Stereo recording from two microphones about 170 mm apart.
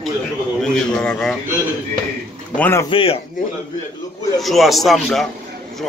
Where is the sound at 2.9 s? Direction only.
30° left (ahead or behind).